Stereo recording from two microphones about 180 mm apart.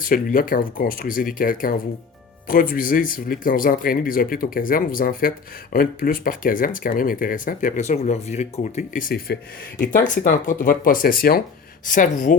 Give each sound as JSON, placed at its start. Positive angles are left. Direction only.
{"t": 0.0, "sound": "speech", "side_deg": 50}